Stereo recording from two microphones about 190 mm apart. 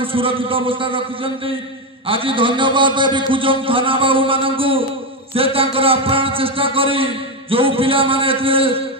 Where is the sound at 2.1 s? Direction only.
25° right (ahead or behind).